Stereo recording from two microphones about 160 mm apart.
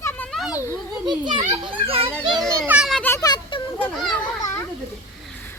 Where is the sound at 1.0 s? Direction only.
30° right (ahead or behind).